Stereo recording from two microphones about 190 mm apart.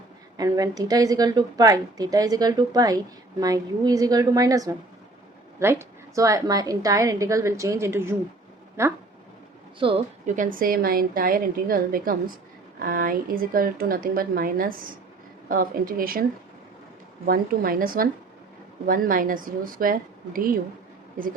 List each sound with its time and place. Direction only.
0.3 s a woman's voice: 20° right (ahead or behind)
6.1 s a woman's voice: 15° right (ahead or behind)
9.8 s a woman's voice: 25° right (ahead or behind)
10.2 s a woman's voice: 45° right (ahead or behind)
17.2 s a woman's voice: 50° right (ahead or behind)